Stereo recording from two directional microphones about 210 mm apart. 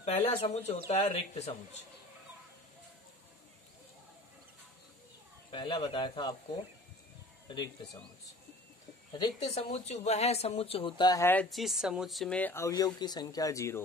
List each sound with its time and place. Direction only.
0.0 s speech: 30° left (ahead or behind)
5.5 s a man's voice: 25° left (ahead or behind)
7.4 s a man's voice: 20° left (ahead or behind)
9.1 s speech: 25° left (ahead or behind)